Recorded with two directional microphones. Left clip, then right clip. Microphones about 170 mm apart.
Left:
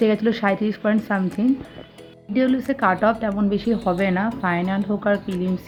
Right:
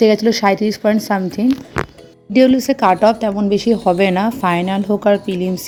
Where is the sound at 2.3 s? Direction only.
40° right (ahead or behind).